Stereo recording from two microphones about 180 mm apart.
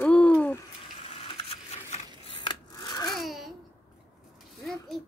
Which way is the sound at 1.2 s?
35° left (ahead or behind).